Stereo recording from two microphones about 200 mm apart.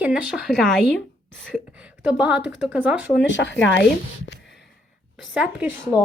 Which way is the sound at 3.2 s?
65° left (ahead or behind).